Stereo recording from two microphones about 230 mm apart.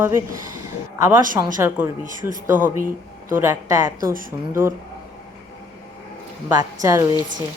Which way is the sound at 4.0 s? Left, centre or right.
Right.